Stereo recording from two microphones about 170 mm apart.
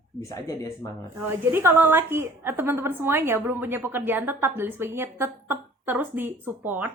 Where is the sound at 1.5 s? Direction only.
15° right (ahead or behind).